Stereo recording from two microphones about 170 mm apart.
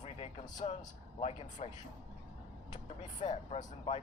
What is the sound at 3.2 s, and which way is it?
Speech, 40° left (ahead or behind).